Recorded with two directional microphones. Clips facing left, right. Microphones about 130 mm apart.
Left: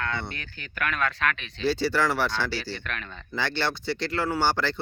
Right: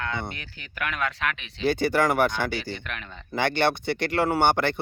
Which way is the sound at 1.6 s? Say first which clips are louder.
Right 2 dB; 55° right (ahead or behind).